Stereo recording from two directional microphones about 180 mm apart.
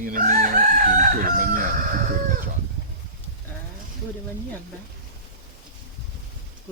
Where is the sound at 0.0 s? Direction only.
50° right (ahead or behind).